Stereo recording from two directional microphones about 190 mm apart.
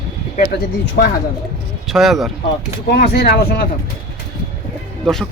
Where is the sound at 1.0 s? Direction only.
55° left (ahead or behind).